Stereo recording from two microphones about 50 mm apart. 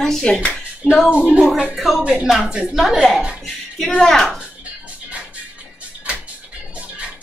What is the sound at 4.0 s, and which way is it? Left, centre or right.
Speech, centre.